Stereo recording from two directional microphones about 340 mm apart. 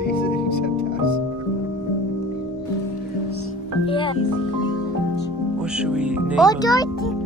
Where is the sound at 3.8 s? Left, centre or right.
Centre.